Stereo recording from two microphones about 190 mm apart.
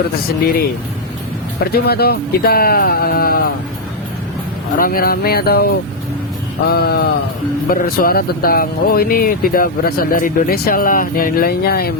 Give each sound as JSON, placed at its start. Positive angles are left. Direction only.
{"t": 1.6, "sound": "speech", "side_deg": 55}
{"t": 4.8, "sound": "speech", "side_deg": 50}
{"t": 6.7, "sound": "speech", "side_deg": 55}